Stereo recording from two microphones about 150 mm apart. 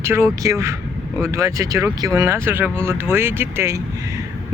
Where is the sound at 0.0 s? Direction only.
20° right (ahead or behind).